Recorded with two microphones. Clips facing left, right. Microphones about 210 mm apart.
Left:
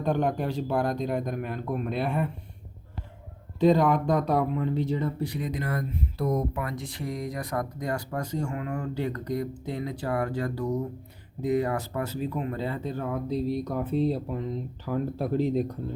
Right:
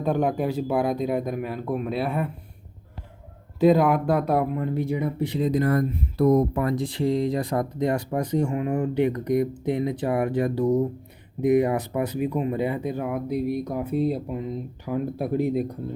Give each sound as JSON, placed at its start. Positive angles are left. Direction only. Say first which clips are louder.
{"t": 0.0, "sound": "speech", "louder": "right 3 dB", "side_deg": -5}
{"t": 3.6, "sound": "speech", "louder": "right 3 dB", "side_deg": -5}